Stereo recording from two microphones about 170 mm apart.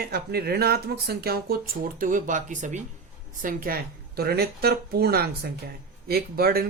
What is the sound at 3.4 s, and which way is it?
Speech, 60° right (ahead or behind).